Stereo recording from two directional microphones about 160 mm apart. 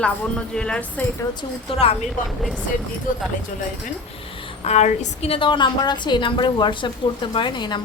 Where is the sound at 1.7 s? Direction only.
35° left (ahead or behind).